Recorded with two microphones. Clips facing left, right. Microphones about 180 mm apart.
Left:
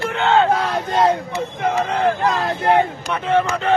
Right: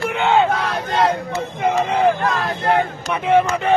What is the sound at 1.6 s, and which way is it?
Speech, 5° right (ahead or behind).